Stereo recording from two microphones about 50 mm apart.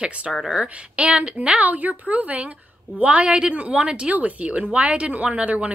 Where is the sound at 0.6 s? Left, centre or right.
Right.